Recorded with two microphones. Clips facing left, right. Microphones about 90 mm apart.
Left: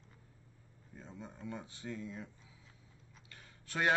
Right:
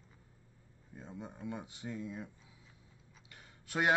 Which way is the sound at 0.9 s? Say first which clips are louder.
Right 3 dB; 15° right (ahead or behind).